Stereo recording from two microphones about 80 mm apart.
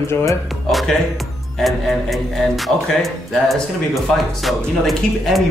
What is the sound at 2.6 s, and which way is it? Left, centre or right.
Speech, centre.